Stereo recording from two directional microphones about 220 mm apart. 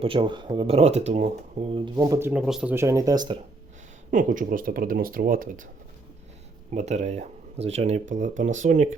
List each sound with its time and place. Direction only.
0.0 s speech: 25° right (ahead or behind)
4.1 s speech: 35° right (ahead or behind)
6.7 s speech: 30° right (ahead or behind)